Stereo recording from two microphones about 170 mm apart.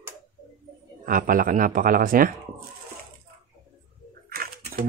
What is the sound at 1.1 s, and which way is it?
Speech, 55° right (ahead or behind).